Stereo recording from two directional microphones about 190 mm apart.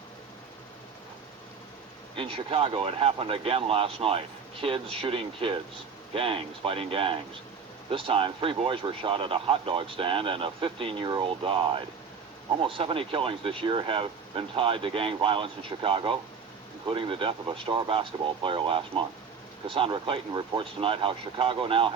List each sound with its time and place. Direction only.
2.1 s speech: 30° right (ahead or behind)